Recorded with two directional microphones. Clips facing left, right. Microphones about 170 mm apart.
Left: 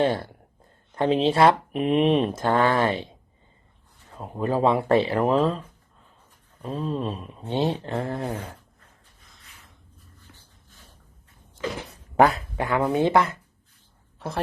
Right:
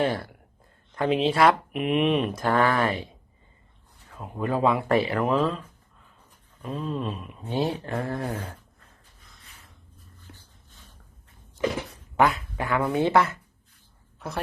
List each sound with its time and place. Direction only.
0.0 s speech: 30° left (ahead or behind)
4.2 s speech: 35° left (ahead or behind)
6.6 s speech: 35° left (ahead or behind)
11.6 s speech: 20° right (ahead or behind)
12.1 s speech: 35° left (ahead or behind)
12.5 s speech: 20° left (ahead or behind)